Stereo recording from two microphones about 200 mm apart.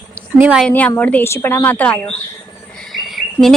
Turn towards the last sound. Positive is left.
turn(degrees=0)  # may be behind; listen again after turning